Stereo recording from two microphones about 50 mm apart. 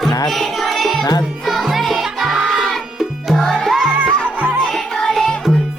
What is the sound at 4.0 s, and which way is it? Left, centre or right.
Music, right.